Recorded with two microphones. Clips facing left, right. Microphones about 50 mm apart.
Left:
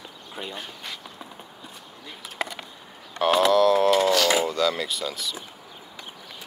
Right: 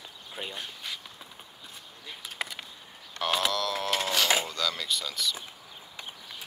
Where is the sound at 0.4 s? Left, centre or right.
Centre.